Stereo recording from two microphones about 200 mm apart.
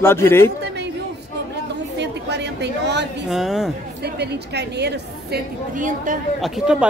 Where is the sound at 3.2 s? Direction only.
Centre (ahead or behind).